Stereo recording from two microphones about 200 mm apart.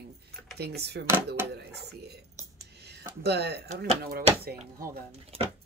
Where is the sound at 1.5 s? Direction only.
55° right (ahead or behind).